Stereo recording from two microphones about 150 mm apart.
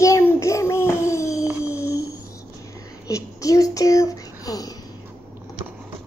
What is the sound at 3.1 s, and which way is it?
A child's voice, 20° left (ahead or behind).